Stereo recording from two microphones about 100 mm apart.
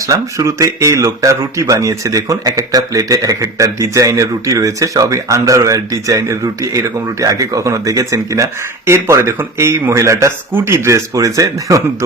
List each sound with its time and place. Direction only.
0.0 s speech: 35° right (ahead or behind)